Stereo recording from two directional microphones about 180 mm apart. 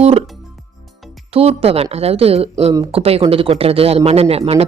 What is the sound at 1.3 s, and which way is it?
Speech, 35° right (ahead or behind).